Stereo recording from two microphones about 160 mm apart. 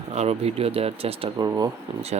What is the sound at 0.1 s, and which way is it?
Speech, 40° right (ahead or behind).